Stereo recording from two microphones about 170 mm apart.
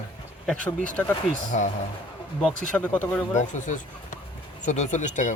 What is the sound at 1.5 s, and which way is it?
Speech, 45° left (ahead or behind).